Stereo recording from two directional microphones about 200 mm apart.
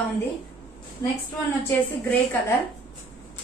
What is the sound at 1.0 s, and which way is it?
Speech, 15° left (ahead or behind).